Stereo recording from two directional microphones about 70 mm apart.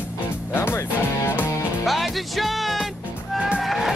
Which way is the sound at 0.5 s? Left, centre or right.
Left.